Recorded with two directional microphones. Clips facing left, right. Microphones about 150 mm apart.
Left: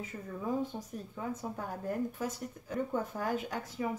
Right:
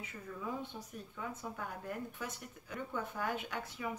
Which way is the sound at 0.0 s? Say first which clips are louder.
Left 5 dB; 40° left (ahead or behind).